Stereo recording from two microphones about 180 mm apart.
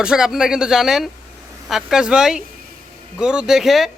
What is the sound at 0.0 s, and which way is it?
Speech, 5° right (ahead or behind).